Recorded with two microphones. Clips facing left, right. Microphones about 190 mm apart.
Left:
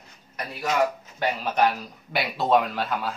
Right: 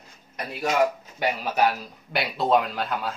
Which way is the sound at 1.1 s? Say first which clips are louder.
Left 1 dB; 10° right (ahead or behind).